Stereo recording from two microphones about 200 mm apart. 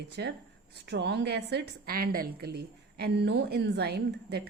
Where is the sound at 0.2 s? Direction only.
60° right (ahead or behind).